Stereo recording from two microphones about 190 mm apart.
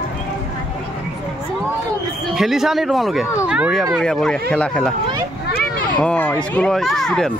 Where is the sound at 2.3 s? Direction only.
Centre (ahead or behind).